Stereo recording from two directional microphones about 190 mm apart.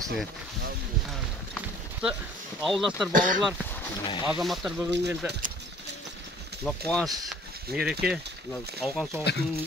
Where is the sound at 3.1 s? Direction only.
45° right (ahead or behind).